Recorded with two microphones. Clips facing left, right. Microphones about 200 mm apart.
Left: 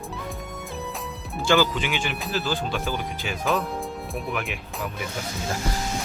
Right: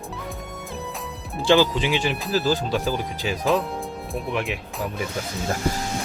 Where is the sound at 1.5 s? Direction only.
30° right (ahead or behind).